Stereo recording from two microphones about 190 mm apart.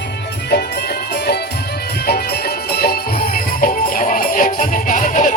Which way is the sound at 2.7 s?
55° left (ahead or behind).